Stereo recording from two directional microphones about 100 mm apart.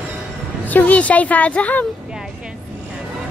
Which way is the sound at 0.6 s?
15° left (ahead or behind).